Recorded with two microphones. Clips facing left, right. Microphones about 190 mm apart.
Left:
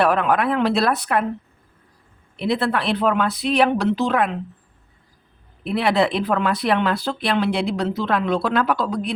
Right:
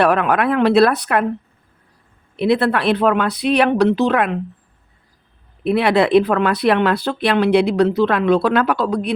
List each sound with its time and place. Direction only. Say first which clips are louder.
0.0 s speech: right 3 dB; 65° right (ahead or behind)
2.3 s speech: right 5 dB; 65° right (ahead or behind)
5.6 s speech: right 4 dB; 60° right (ahead or behind)